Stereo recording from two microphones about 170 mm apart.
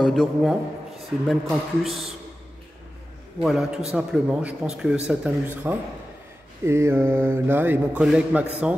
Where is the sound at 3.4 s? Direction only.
Centre (ahead or behind).